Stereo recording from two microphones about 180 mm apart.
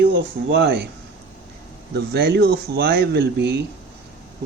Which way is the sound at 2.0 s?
65° right (ahead or behind).